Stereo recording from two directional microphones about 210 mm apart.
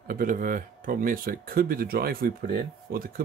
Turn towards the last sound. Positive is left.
turn(degrees=-45)  # may be behind; listen again after turning